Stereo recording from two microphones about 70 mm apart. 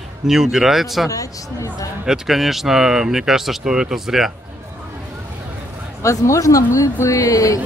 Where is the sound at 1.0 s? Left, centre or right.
Left.